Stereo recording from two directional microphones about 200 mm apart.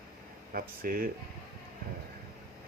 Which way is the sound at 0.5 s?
45° right (ahead or behind).